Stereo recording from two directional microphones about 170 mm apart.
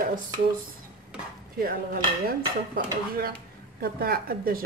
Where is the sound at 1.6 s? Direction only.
60° right (ahead or behind).